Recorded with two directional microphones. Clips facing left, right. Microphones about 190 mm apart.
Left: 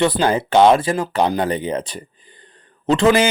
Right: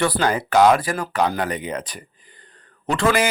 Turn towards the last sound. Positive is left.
turn(degrees=25)  # may be behind; listen again after turning